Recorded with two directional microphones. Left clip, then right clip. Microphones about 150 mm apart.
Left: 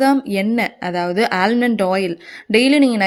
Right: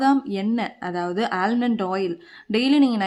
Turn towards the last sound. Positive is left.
turn(degrees=25)  # may be behind; listen again after turning